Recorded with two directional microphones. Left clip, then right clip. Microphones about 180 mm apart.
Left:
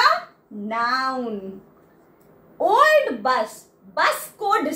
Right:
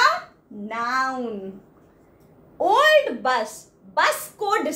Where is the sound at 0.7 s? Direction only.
20° right (ahead or behind).